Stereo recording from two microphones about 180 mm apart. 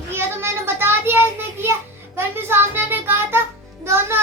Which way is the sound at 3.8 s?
15° right (ahead or behind).